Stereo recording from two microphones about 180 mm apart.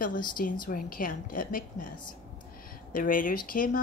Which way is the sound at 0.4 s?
50° left (ahead or behind).